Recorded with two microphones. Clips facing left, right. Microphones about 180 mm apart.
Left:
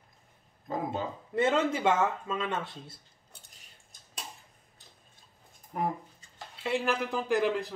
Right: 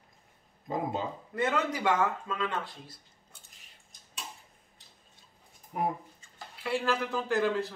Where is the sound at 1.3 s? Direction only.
25° left (ahead or behind).